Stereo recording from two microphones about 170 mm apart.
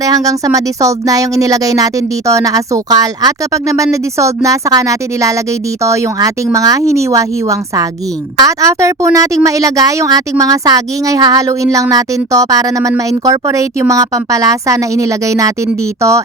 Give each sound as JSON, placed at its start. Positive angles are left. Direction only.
{"t": 0.0, "sound": "speech", "side_deg": -20}